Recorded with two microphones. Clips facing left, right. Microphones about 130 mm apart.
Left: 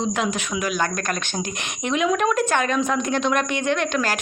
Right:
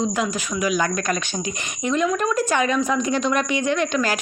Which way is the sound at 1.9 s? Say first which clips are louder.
Left 1 dB; 70° left (ahead or behind).